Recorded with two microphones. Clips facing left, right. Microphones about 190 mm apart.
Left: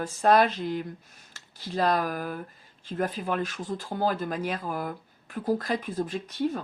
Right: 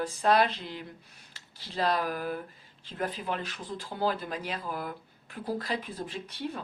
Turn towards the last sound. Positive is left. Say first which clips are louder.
# left 8 dB
turn(degrees=45)  # may be behind; listen again after turning